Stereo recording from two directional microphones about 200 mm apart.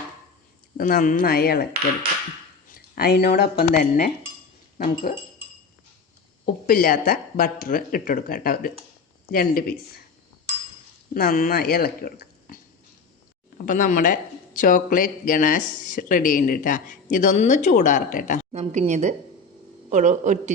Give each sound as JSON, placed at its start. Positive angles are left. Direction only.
{"t": 0.8, "sound": "speech", "side_deg": 45}
{"t": 2.7, "sound": "speech", "side_deg": 50}
{"t": 6.4, "sound": "speech", "side_deg": 50}
{"t": 11.1, "sound": "speech", "side_deg": 45}
{"t": 13.7, "sound": "speech", "side_deg": 45}
{"t": 18.5, "sound": "a man's voice", "side_deg": -35}